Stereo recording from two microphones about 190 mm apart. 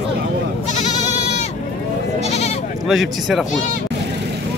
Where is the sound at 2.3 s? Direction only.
35° left (ahead or behind).